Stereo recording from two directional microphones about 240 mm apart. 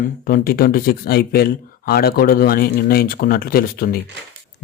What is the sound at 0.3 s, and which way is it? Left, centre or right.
Speech, left.